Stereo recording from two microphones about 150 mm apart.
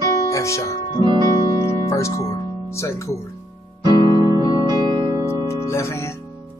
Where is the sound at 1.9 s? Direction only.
20° left (ahead or behind).